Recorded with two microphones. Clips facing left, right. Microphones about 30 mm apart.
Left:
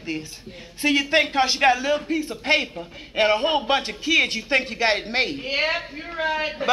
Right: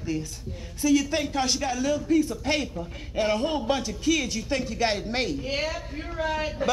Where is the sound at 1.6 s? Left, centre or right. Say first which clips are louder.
Left 11 dB; left.